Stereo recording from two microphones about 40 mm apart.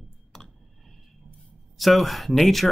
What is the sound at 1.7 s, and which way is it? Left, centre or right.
Speech, centre.